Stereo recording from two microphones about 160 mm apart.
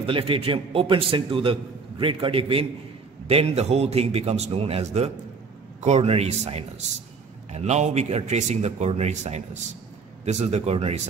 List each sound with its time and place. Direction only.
0.0 s a man's voice: 35° right (ahead or behind)